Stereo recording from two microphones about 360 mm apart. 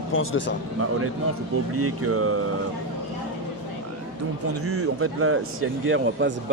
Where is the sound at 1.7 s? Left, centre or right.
Right.